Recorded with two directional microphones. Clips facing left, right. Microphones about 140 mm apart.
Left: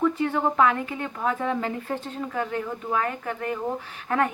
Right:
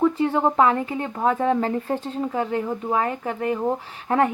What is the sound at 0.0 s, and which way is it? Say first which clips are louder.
A woman's voice: right 4 dB; 30° right (ahead or behind).